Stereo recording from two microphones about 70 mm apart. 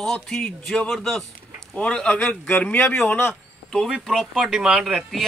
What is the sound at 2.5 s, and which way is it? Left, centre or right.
Speech, left.